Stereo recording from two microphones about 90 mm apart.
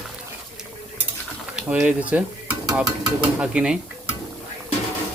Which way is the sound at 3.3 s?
15° right (ahead or behind).